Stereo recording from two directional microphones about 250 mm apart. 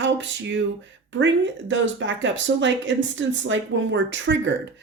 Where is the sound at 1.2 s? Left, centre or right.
Right.